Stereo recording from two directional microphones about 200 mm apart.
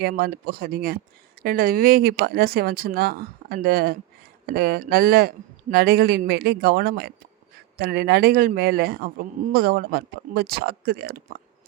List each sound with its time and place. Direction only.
0.0 s a man's voice: 50° right (ahead or behind)